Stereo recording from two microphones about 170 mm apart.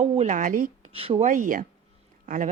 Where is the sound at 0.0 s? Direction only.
45° right (ahead or behind).